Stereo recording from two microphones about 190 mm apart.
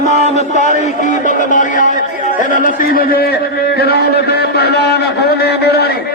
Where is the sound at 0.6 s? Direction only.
40° left (ahead or behind).